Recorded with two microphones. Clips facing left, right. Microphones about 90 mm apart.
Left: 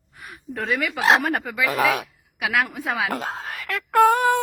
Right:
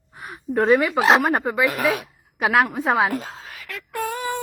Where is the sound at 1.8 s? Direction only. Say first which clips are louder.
Left 1 dB; 90° left.